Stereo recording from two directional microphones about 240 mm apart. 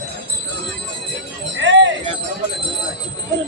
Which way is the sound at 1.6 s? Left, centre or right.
Right.